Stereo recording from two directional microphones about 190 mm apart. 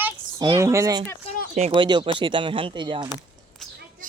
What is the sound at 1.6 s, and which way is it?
Speech, 30° right (ahead or behind).